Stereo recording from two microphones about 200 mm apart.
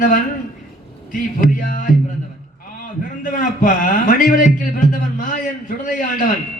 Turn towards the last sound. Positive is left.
turn(degrees=45)  # may be behind; listen again after turning